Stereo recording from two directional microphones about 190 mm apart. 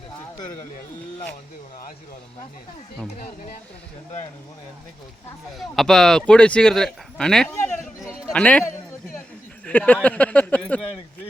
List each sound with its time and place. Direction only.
3.2 s speech: 45° left (ahead or behind)
5.5 s a man's voice: centre (ahead or behind)
9.6 s speech: 10° left (ahead or behind)